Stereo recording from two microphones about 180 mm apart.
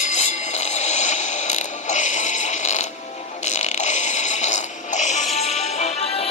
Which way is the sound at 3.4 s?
40° left (ahead or behind).